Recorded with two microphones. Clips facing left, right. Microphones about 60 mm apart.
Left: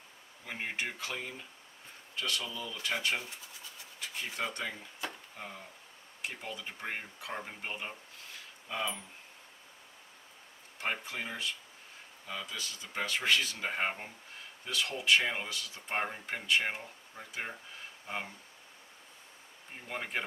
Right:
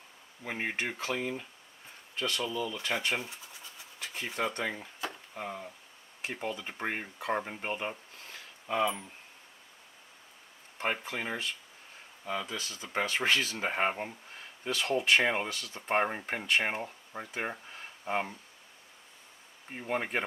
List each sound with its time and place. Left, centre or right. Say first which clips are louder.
0.4 s speech: right 3 dB; right
5.4 s speech: right 7 dB; right
6.2 s speech: right 5 dB; right
11.0 s speech: right 3 dB; right
14.6 s speech: right 5 dB; right
19.9 s speech: right 5 dB; right